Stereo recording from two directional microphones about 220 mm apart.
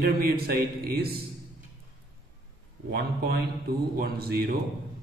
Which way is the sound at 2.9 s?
45° right (ahead or behind).